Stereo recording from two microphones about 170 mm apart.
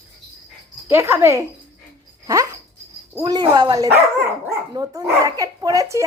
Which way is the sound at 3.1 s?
25° right (ahead or behind).